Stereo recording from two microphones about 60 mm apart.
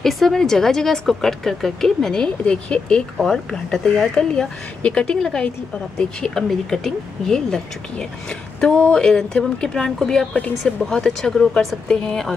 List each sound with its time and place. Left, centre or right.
0.0 s speech: centre